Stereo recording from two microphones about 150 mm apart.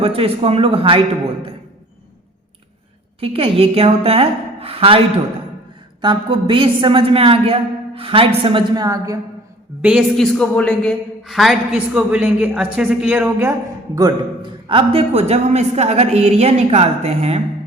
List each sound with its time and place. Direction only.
0.0 s a woman's voice: 40° right (ahead or behind)
3.2 s a woman's voice: 40° right (ahead or behind)
9.8 s a woman's voice: 5° right (ahead or behind); by 17.4 s 45° right (ahead or behind)